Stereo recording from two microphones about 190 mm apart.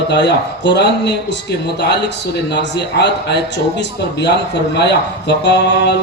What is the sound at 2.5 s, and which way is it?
Speech, 65° left (ahead or behind).